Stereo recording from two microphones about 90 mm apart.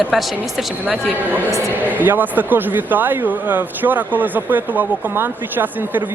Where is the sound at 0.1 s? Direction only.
Centre (ahead or behind).